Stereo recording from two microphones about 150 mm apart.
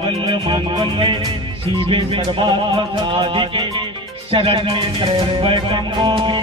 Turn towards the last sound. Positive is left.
turn(degrees=-30)  # may be behind; listen again after turning